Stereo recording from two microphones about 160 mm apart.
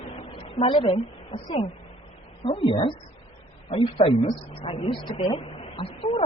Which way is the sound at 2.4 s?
35° left (ahead or behind).